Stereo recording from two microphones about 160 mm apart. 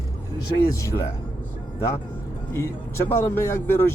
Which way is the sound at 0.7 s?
15° left (ahead or behind).